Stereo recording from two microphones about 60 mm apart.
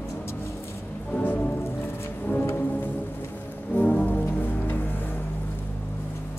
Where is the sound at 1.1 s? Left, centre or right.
Left.